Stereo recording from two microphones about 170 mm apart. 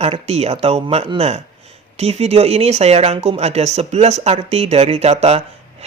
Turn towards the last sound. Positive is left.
turn(degrees=-40)  # may be behind; listen again after turning